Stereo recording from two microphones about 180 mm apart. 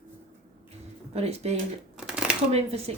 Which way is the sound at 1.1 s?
35° right (ahead or behind).